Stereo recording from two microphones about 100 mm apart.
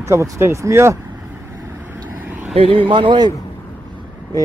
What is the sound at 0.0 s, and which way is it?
Speech, 30° right (ahead or behind).